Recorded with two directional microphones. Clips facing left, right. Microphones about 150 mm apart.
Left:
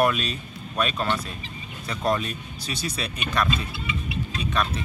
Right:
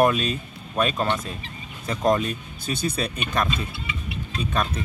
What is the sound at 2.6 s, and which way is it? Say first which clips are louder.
Speech: right 5 dB; 50° right (ahead or behind).